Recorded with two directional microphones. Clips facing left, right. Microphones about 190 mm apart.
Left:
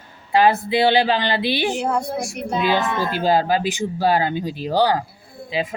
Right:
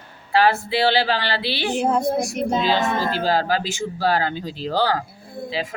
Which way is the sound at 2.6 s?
15° left (ahead or behind).